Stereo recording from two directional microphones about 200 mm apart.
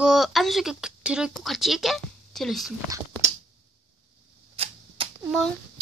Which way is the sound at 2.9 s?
15° right (ahead or behind).